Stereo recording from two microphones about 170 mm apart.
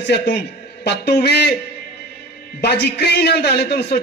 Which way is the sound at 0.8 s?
75° left (ahead or behind).